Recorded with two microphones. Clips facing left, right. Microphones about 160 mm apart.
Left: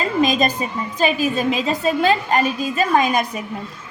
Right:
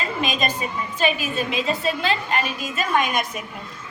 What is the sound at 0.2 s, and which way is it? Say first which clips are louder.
A woman's voice: left 8 dB; 40° left (ahead or behind).